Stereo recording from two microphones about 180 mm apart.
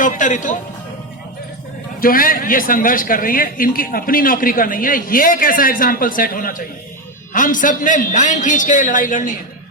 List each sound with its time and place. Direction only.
0.0 s music: 45° left (ahead or behind)
2.0 s a man's voice: 50° left (ahead or behind)